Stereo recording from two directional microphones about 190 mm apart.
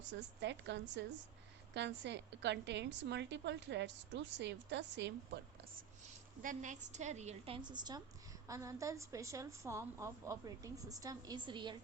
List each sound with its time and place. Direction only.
0.1 s a woman's voice: 65° right (ahead or behind)
6.4 s a woman's voice: 40° right (ahead or behind); by 11.8 s 25° right (ahead or behind)